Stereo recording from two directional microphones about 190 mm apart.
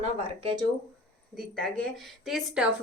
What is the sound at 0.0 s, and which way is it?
Speech, 25° right (ahead or behind).